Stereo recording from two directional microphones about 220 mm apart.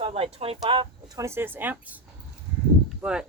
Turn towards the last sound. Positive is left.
turn(degrees=-5)  # may be behind; listen again after turning